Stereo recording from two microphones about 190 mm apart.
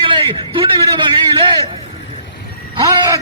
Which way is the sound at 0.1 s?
25° right (ahead or behind).